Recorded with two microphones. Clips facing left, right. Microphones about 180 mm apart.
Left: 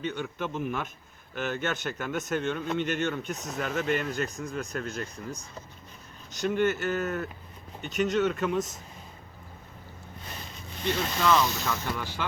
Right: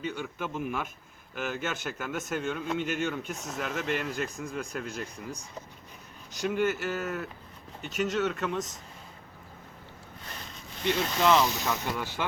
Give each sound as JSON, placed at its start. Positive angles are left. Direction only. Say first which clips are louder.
{"t": 0.0, "sound": "speech", "louder": "left 2 dB", "side_deg": -5}
{"t": 10.8, "sound": "speech", "louder": "right 1 dB", "side_deg": -20}